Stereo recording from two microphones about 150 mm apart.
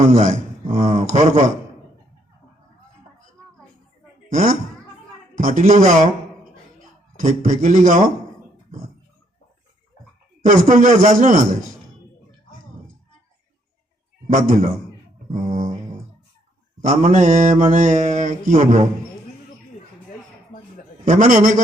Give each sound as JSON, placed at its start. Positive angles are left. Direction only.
{"t": 0.0, "sound": "mantra", "side_deg": -55}
{"t": 4.3, "sound": "speech", "side_deg": -60}
{"t": 5.3, "sound": "mantra", "side_deg": -60}
{"t": 7.2, "sound": "mantra", "side_deg": -60}
{"t": 10.4, "sound": "mantra", "side_deg": -60}
{"t": 14.3, "sound": "mantra", "side_deg": -65}
{"t": 15.4, "sound": "a sound", "side_deg": -60}
{"t": 16.8, "sound": "mantra", "side_deg": -60}
{"t": 21.0, "sound": "mantra", "side_deg": -55}